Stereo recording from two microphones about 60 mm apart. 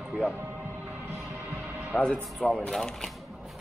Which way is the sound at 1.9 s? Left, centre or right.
Centre.